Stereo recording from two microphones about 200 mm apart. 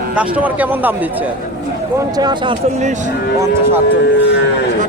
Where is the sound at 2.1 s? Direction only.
20° right (ahead or behind); by 3.1 s 35° right (ahead or behind).